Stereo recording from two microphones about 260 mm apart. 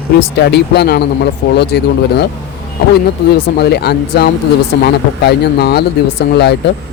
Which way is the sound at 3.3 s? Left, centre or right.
Left.